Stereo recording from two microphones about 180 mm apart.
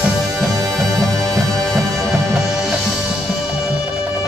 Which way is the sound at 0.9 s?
Centre (ahead or behind).